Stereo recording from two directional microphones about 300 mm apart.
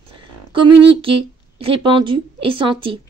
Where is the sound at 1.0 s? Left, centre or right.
Centre.